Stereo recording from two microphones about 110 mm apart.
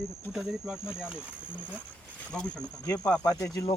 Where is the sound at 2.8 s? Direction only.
35° left (ahead or behind).